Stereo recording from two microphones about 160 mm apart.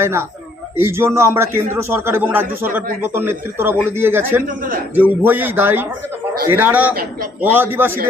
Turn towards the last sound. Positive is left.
turn(degrees=-10)  # may be behind; listen again after turning